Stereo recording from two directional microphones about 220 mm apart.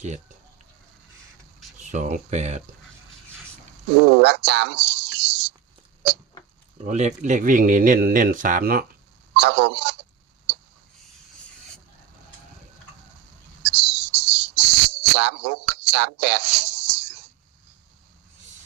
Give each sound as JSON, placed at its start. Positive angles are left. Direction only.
{"t": 1.8, "sound": "speech", "side_deg": -35}
{"t": 3.9, "sound": "speech", "side_deg": -50}
{"t": 6.8, "sound": "speech", "side_deg": -30}
{"t": 9.3, "sound": "speech", "side_deg": -50}
{"t": 13.6, "sound": "cricket", "side_deg": -50}